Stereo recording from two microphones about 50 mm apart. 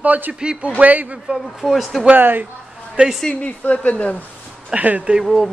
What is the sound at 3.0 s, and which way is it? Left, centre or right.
Speech, right.